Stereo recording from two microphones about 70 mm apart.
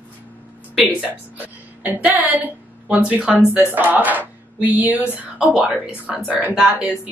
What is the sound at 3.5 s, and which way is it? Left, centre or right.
Speech, left.